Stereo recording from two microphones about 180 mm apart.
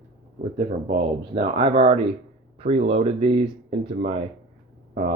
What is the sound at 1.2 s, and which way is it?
Speech, 35° right (ahead or behind).